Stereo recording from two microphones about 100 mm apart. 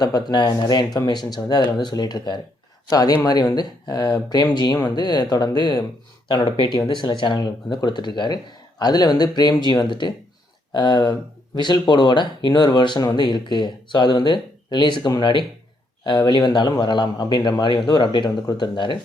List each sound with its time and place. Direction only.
0.0 s speech: 45° left (ahead or behind)